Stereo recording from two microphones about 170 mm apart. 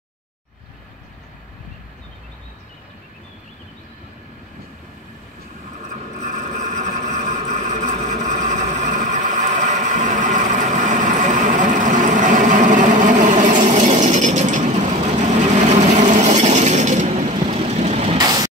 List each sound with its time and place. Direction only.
6.2 s vehicle: 45° right (ahead or behind)
10.8 s a sound: 50° right (ahead or behind)
18.1 s vehicle: 20° right (ahead or behind)